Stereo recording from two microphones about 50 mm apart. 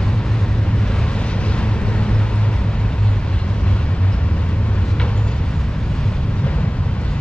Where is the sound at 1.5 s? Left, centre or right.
Left.